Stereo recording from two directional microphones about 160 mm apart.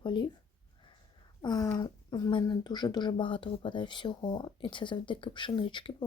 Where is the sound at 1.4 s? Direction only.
25° left (ahead or behind).